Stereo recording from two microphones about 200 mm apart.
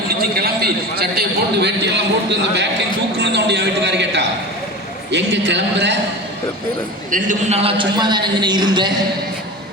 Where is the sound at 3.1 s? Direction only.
55° right (ahead or behind).